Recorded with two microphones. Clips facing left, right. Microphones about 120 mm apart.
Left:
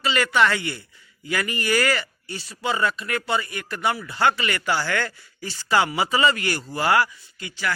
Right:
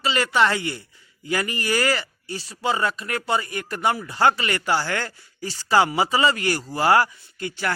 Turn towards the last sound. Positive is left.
turn(degrees=-45)  # may be behind; listen again after turning